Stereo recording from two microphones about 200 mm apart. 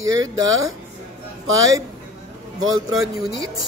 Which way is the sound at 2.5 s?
85° right.